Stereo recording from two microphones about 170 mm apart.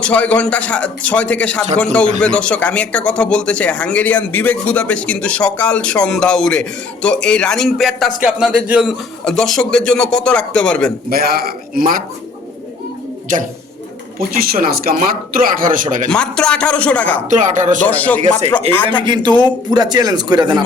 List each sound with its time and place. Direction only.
0.0 s a man's voice: 5° left (ahead or behind)
11.1 s speech: 65° right (ahead or behind)
13.3 s speech: 50° right (ahead or behind)
16.0 s speech: 5° left (ahead or behind)
17.2 s speech: 45° right (ahead or behind)
17.8 s a man's voice: 10° left (ahead or behind)
18.7 s a man's voice: 35° right (ahead or behind)